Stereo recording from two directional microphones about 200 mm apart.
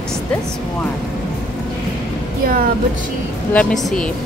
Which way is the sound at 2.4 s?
45° right (ahead or behind).